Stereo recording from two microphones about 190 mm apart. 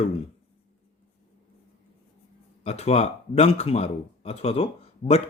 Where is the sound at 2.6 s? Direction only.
35° left (ahead or behind).